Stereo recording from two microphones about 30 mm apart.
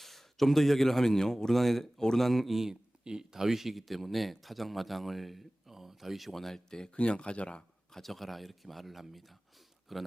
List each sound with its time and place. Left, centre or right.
0.0 s speech: centre
3.0 s speech: right
3.4 s speech: centre
6.3 s speech: centre
6.7 s speech: centre
6.9 s speech: left
7.9 s speech: centre